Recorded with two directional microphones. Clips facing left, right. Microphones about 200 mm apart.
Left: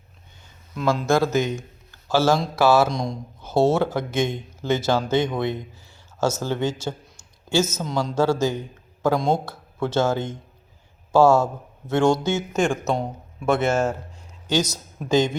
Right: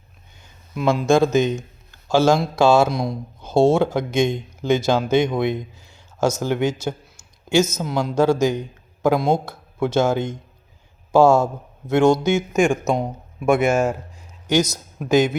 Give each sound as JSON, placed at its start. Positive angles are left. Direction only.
{"t": 0.7, "sound": "speech", "side_deg": -15}